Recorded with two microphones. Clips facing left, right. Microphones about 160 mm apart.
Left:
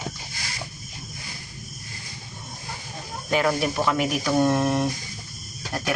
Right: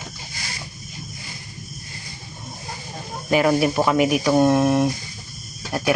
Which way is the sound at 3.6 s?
10° right (ahead or behind).